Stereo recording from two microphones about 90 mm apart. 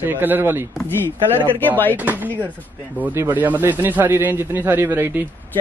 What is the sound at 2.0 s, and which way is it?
Speech, 20° right (ahead or behind).